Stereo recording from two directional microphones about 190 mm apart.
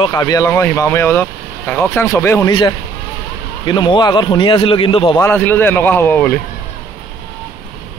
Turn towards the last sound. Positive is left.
turn(degrees=10)  # may be behind; listen again after turning